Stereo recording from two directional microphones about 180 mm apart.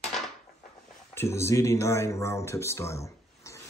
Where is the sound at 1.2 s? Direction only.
15° left (ahead or behind).